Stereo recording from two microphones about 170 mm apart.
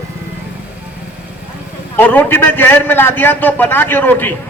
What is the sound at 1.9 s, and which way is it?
A man's voice, 10° left (ahead or behind).